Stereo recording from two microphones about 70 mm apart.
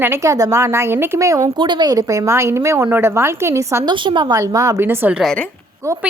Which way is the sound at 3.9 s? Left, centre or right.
Right.